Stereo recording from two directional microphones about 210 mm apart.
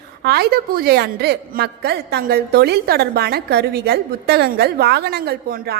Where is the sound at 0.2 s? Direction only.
50° right (ahead or behind).